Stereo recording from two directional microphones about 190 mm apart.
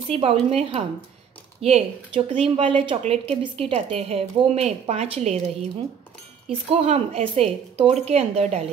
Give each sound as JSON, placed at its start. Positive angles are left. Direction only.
{"t": 0.1, "sound": "speech", "side_deg": -30}
{"t": 6.8, "sound": "speech", "side_deg": -35}